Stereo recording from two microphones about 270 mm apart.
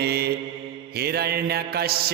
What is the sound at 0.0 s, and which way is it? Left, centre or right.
Mantra, right.